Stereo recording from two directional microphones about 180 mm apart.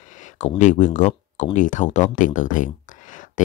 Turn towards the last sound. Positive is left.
turn(degrees=45)  # may be behind; listen again after turning